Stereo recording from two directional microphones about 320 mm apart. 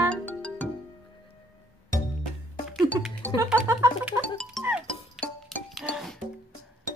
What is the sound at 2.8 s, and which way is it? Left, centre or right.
Speech, centre.